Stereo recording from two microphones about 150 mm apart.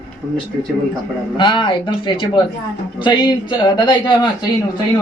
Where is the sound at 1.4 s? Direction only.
35° left (ahead or behind).